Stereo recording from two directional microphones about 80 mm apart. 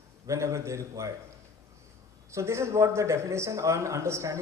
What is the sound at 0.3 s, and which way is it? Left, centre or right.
Speech, right.